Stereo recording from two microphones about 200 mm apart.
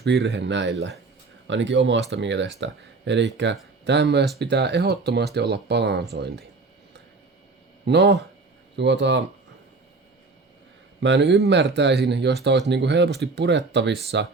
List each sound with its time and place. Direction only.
0.0 s speech: 55° right (ahead or behind)
7.9 s speech: 60° right (ahead or behind)
11.0 s speech: 60° right (ahead or behind)